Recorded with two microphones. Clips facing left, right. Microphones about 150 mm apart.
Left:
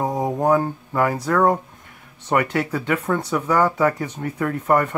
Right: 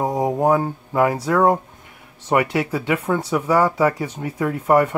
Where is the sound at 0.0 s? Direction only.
10° right (ahead or behind).